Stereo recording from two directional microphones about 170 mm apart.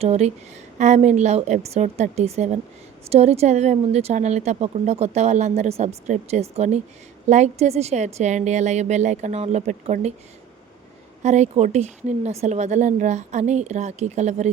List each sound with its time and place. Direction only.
0.0 s speech: 40° right (ahead or behind)
11.2 s speech: 40° right (ahead or behind)